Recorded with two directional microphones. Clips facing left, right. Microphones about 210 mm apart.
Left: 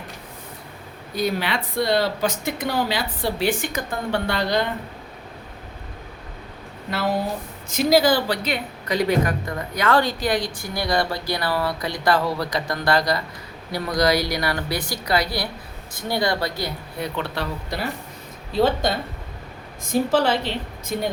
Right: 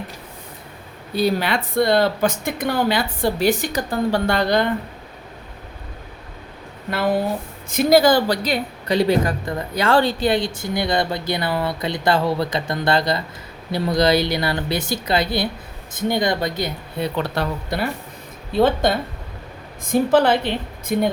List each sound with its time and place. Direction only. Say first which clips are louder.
1.4 s speech: right 4 dB; 45° right (ahead or behind)
7.7 s speech: right 3 dB; 55° right (ahead or behind); by 17.1 s 20° right (ahead or behind)
17.2 s a woman's voice: right 4 dB; 45° right (ahead or behind)